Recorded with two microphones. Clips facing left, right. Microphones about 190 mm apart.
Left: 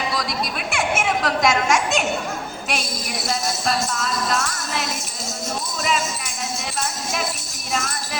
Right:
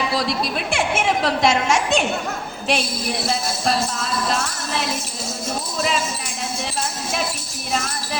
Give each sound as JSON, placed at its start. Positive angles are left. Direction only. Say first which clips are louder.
{"t": 0.1, "sound": "a woman's voice", "louder": "right 3 dB", "side_deg": -30}
{"t": 2.6, "sound": "music", "louder": "right 7 dB", "side_deg": -30}
{"t": 7.7, "sound": "music", "louder": "right 1 dB", "side_deg": -30}